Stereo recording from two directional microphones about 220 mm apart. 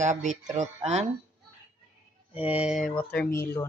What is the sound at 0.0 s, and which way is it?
Speech, 35° right (ahead or behind).